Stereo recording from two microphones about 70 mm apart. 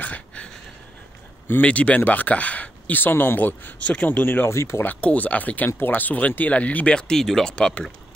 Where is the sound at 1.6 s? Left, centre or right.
Centre.